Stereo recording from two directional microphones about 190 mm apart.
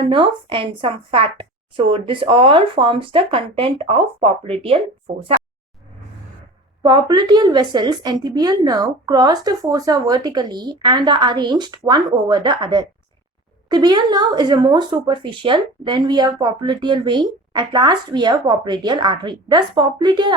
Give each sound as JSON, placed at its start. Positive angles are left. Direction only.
{"t": 0.0, "sound": "speech", "side_deg": -25}
{"t": 6.8, "sound": "speech", "side_deg": -20}